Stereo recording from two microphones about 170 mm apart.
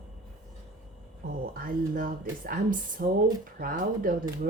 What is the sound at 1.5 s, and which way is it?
Speech, 55° right (ahead or behind).